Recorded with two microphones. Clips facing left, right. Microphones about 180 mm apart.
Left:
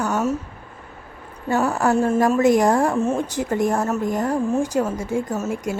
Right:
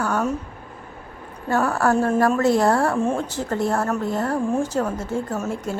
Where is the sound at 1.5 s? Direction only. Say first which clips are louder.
Even; 10° left (ahead or behind).